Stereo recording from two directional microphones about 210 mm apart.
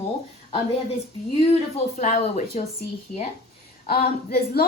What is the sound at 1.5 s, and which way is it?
Speech, 35° left (ahead or behind).